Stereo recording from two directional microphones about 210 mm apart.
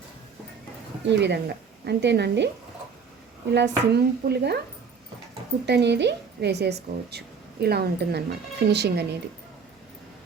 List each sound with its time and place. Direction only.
1.2 s a woman's voice: 55° right (ahead or behind)
3.5 s speech: 50° right (ahead or behind)
5.6 s speech: 55° right (ahead or behind)